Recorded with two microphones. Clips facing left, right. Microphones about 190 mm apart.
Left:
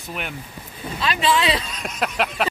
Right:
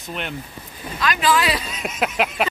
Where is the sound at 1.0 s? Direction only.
30° left (ahead or behind).